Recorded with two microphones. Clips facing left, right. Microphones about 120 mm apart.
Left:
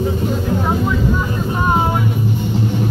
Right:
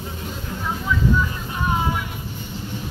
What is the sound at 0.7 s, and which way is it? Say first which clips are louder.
Vehicle: even; 60° left (ahead or behind).